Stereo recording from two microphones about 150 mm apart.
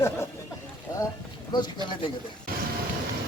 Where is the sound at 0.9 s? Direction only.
20° left (ahead or behind).